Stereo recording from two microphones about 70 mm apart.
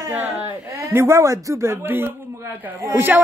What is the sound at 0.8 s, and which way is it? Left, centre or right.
A woman's voice, right.